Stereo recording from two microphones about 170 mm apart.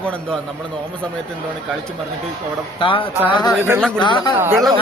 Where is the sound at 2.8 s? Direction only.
30° left (ahead or behind).